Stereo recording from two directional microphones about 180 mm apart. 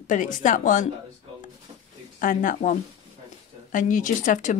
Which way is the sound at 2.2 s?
50° left (ahead or behind).